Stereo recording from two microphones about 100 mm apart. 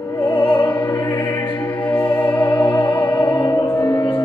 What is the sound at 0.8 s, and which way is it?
Music, 55° left (ahead or behind).